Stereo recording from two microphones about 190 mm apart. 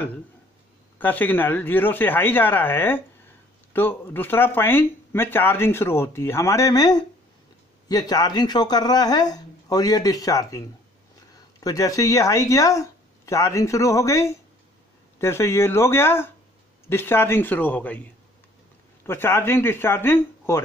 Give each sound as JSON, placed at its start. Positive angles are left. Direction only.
{"t": 0.9, "sound": "speech", "side_deg": 10}
{"t": 11.6, "sound": "speech", "side_deg": 20}
{"t": 19.0, "sound": "speech", "side_deg": 10}